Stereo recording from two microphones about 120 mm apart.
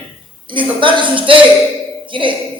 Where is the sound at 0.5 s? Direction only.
45° right (ahead or behind).